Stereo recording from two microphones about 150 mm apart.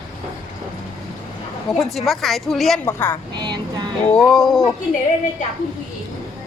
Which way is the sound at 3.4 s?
30° right (ahead or behind).